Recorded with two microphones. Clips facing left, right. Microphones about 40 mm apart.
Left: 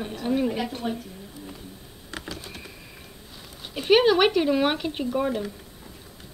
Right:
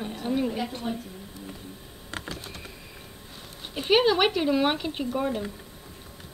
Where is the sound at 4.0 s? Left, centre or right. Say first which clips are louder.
Left 3 dB; centre.